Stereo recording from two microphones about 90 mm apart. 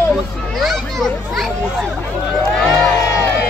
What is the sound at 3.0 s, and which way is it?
Music, 30° left (ahead or behind).